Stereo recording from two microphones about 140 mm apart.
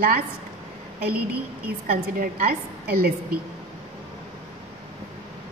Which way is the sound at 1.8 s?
90° right.